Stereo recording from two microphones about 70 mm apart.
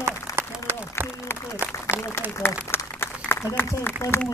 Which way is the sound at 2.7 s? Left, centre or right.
Left.